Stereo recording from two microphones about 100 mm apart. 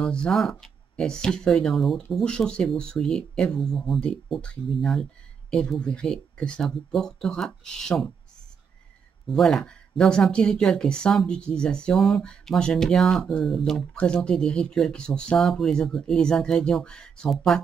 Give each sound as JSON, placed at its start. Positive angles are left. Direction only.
{"t": 0.0, "sound": "speech", "side_deg": 10}
{"t": 9.3, "sound": "speech", "side_deg": 5}